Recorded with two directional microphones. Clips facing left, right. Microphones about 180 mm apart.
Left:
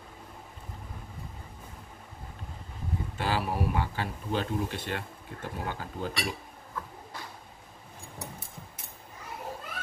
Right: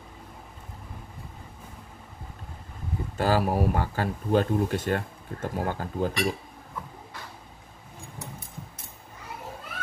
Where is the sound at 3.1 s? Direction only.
45° right (ahead or behind).